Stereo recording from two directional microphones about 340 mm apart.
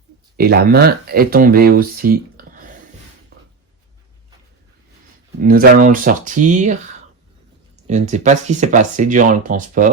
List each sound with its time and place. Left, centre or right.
0.3 s speech: right
5.5 s speech: right
7.9 s speech: right